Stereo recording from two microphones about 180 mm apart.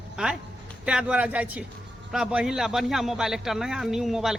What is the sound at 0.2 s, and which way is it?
A man's voice, 5° right (ahead or behind).